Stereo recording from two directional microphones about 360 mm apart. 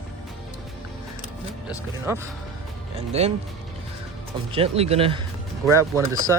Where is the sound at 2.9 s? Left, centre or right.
Centre.